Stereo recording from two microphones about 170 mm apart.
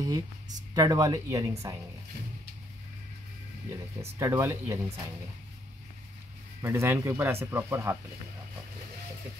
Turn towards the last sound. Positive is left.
turn(degrees=-15)  # may be behind; listen again after turning